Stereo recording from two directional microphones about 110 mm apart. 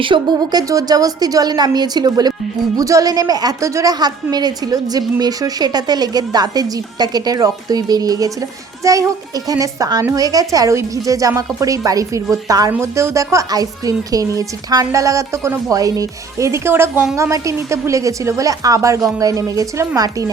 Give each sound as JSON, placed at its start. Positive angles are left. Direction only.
{"t": 0.0, "sound": "a woman's voice", "side_deg": -45}